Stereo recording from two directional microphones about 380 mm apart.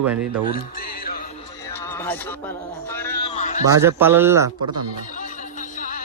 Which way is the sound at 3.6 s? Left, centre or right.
Centre.